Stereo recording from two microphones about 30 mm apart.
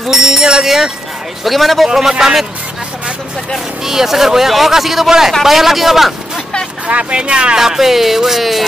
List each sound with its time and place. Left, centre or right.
0.1 s bell: centre
0.7 s a man's voice: centre
2.0 s a man's voice: centre
3.8 s speech: centre
6.9 s speech: right
7.2 s speech: right
7.5 s speech: centre